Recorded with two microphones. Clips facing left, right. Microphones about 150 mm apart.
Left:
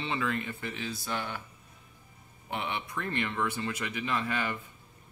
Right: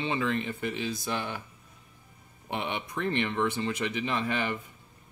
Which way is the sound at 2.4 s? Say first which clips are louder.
Right 2 dB; 20° right (ahead or behind).